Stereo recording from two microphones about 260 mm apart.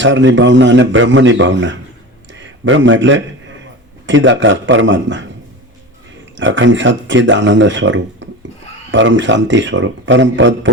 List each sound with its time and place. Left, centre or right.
0.0 s a man's voice: right
6.3 s speech: right